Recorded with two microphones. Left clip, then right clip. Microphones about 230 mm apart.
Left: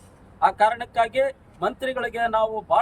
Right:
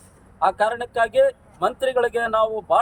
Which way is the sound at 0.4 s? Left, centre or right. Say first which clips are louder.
Left 1 dB; centre.